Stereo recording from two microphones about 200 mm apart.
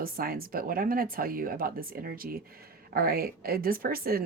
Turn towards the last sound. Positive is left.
turn(degrees=-50)  # may be behind; listen again after turning